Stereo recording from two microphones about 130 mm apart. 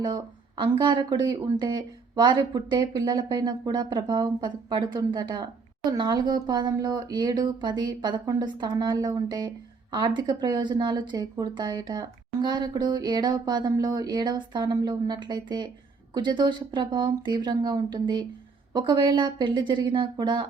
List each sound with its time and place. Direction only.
0.0 s speech: 35° right (ahead or behind)